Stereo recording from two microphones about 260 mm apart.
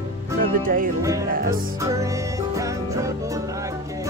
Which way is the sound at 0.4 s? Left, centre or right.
Right.